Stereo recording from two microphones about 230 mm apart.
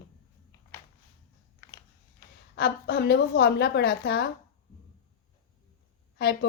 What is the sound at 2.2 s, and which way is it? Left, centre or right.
A woman's voice, left.